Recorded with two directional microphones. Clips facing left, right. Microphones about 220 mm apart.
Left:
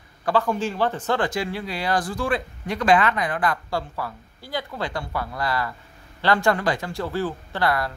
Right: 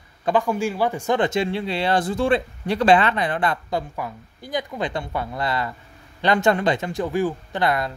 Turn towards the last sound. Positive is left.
turn(degrees=-20)  # may be behind; listen again after turning